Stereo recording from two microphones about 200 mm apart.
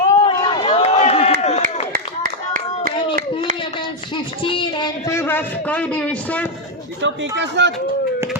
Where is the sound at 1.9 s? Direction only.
50° right (ahead or behind).